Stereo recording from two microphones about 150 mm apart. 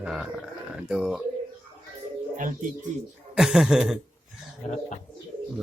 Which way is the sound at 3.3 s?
5° right (ahead or behind).